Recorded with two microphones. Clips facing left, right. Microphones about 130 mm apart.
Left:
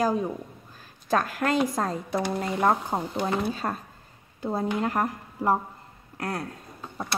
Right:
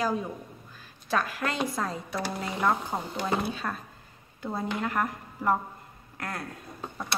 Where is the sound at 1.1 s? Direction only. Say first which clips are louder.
Left 5 dB; 45° left (ahead or behind).